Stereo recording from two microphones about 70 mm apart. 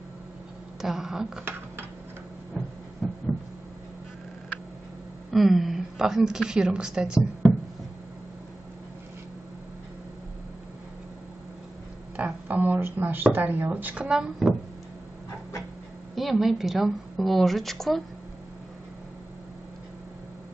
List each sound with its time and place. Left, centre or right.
0.7 s speech: centre
2.6 s heart murmur: centre
3.0 s a sound: centre
5.3 s a woman's voice: centre
12.2 s speech: right
14.0 s speech: centre
16.2 s a woman's voice: centre